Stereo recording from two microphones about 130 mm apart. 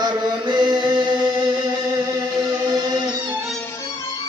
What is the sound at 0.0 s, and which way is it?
Chant, 35° right (ahead or behind).